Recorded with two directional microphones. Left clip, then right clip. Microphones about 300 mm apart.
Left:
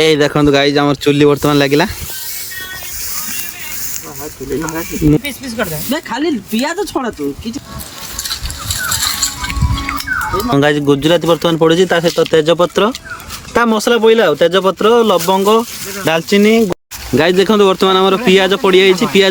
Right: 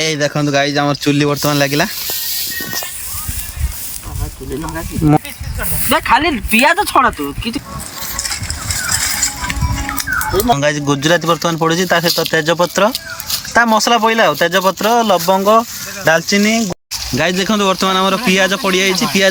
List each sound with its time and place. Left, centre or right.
0.0 s speech: centre
4.6 s speech: centre
10.1 s a sound: right
10.6 s speech: centre